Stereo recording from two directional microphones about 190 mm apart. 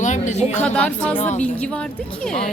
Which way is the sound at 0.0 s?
40° left (ahead or behind).